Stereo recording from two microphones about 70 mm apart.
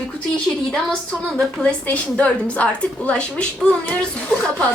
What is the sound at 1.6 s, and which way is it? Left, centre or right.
A woman's voice, centre.